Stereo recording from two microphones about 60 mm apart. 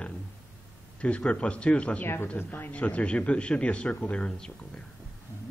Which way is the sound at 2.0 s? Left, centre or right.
Left.